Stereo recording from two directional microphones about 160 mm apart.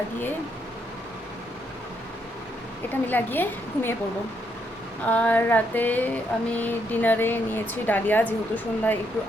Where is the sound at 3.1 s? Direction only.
10° left (ahead or behind).